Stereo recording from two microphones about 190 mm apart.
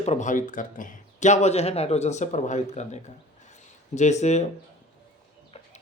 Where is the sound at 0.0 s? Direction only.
35° left (ahead or behind).